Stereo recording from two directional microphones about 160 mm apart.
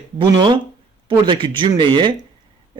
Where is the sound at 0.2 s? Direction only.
30° right (ahead or behind).